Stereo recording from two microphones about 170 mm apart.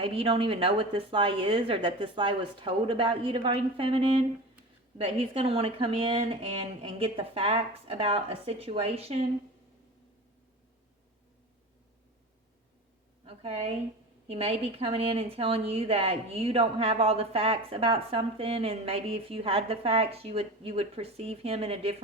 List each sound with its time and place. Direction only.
0.0 s speech: 35° right (ahead or behind)
13.2 s a woman's voice: 35° right (ahead or behind)